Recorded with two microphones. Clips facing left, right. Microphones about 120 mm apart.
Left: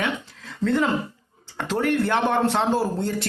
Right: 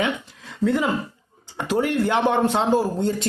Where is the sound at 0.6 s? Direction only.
15° right (ahead or behind).